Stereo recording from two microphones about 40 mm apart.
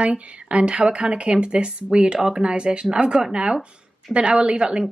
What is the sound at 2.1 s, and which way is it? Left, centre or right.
A woman's voice, centre.